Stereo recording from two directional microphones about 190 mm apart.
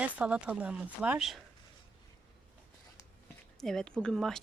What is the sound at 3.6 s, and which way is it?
Speech, centre (ahead or behind).